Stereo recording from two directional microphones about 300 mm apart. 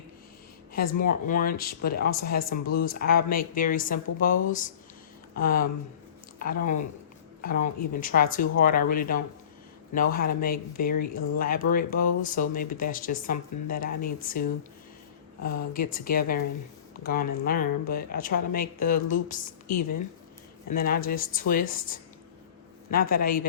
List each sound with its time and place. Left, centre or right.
0.7 s speech: left
15.4 s speech: left